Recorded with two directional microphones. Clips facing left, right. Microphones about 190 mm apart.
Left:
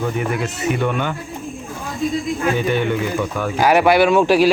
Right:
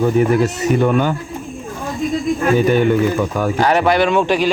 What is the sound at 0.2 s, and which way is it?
Speech, 40° right (ahead or behind).